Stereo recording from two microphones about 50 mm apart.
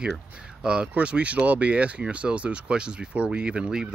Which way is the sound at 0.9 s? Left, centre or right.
Right.